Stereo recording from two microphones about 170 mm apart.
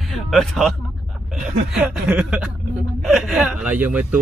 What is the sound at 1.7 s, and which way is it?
Speech, 5° right (ahead or behind).